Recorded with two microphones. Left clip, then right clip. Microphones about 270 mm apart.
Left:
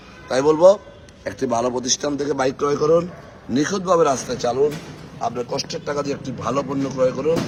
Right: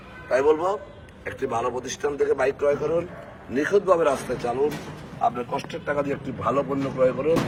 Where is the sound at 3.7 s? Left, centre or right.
Left.